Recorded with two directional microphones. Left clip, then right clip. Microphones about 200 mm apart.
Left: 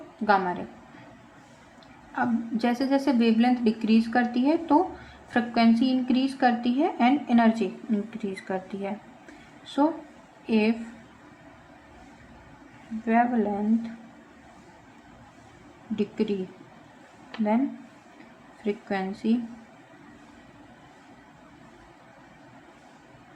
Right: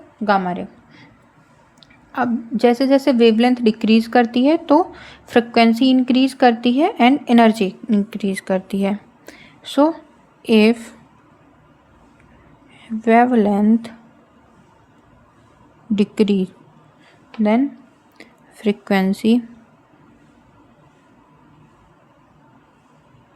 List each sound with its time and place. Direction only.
0.3 s a woman's voice: 50° right (ahead or behind)
2.1 s a woman's voice: 50° right (ahead or behind)
13.1 s a woman's voice: 60° right (ahead or behind)
16.0 s a woman's voice: 60° right (ahead or behind)
18.6 s a woman's voice: 60° right (ahead or behind)